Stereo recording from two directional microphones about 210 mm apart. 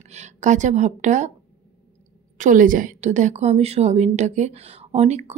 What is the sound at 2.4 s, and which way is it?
Speech, 40° right (ahead or behind).